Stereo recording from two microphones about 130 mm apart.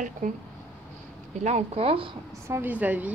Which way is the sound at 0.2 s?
90° right.